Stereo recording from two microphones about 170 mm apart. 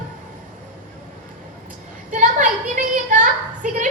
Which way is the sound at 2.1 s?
45° right (ahead or behind).